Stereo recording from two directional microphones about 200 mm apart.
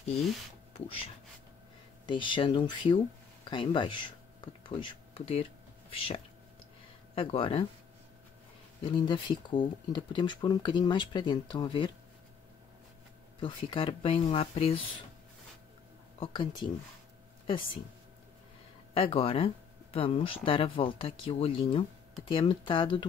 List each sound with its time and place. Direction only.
0.7 s speech: 30° left (ahead or behind)
8.8 s speech: 25° left (ahead or behind)
13.4 s speech: 25° left (ahead or behind)
16.2 s speech: 25° left (ahead or behind)
18.9 s speech: 25° left (ahead or behind)